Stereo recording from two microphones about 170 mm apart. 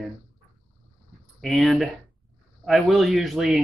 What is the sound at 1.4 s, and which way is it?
Speech, centre (ahead or behind).